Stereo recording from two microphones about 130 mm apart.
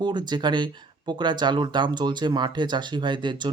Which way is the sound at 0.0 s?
35° right (ahead or behind).